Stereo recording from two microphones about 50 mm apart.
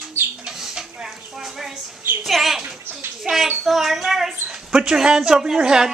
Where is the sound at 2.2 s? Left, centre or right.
Centre.